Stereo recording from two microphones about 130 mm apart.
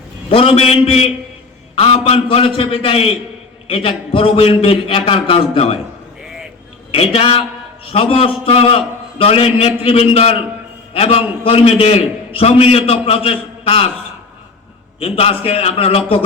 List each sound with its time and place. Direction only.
0.3 s a man's voice: 45° left (ahead or behind)
6.9 s a man's voice: 50° left (ahead or behind)
14.9 s a man's voice: 45° left (ahead or behind)